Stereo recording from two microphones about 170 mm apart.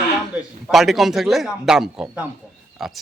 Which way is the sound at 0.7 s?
Centre (ahead or behind).